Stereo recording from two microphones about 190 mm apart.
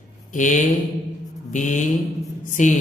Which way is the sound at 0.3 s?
40° left (ahead or behind).